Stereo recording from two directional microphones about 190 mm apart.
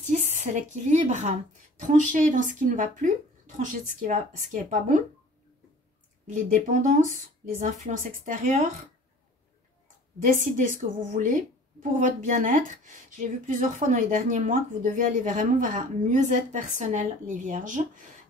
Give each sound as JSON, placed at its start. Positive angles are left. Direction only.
{"t": 0.0, "sound": "speech", "side_deg": -40}
{"t": 6.2, "sound": "speech", "side_deg": -40}
{"t": 10.2, "sound": "speech", "side_deg": -45}